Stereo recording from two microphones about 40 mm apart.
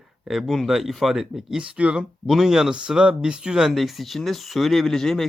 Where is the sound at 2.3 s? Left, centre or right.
Centre.